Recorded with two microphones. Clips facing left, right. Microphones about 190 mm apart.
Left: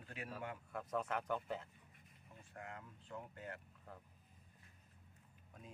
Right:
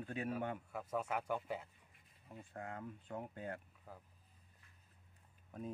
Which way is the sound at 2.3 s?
55° right (ahead or behind).